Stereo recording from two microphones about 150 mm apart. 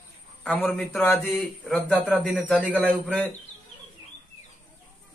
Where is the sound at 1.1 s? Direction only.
Centre (ahead or behind).